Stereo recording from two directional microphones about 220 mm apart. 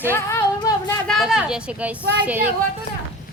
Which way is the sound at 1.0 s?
Centre (ahead or behind).